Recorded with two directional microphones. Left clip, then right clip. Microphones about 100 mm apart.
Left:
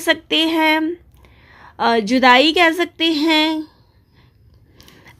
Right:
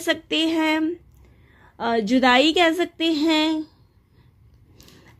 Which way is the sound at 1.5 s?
35° left (ahead or behind).